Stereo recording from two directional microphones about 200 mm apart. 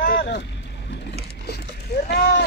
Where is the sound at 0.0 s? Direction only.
45° left (ahead or behind).